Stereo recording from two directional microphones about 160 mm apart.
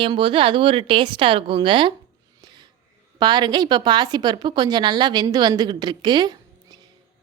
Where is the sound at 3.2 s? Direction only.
25° right (ahead or behind).